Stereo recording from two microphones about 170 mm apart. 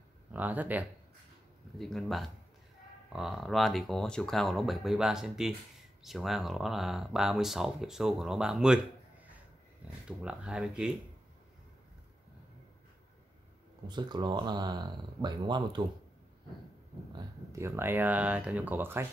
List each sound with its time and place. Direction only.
0.3 s speech: 10° right (ahead or behind)
1.8 s speech: centre (ahead or behind)
10.0 s speech: 5° right (ahead or behind)
13.8 s speech: 25° right (ahead or behind)
17.5 s speech: 15° right (ahead or behind)